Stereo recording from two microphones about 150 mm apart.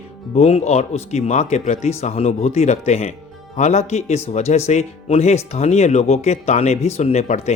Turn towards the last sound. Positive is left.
turn(degrees=45)  # may be behind; listen again after turning